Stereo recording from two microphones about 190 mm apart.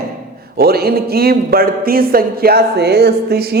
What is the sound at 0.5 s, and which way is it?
Speech, 55° right (ahead or behind).